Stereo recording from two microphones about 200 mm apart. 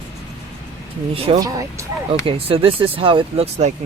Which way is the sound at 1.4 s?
15° right (ahead or behind).